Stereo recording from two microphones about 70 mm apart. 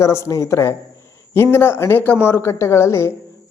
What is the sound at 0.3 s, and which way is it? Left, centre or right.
A man's voice, left.